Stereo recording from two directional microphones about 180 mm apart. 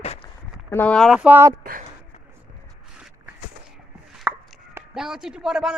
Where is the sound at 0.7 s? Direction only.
10° left (ahead or behind); by 1.5 s 10° right (ahead or behind).